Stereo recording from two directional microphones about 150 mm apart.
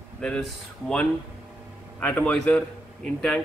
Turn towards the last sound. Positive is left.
turn(degrees=5)  # may be behind; listen again after turning